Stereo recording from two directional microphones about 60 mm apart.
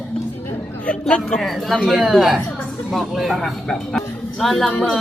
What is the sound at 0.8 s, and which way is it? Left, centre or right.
Speech, centre.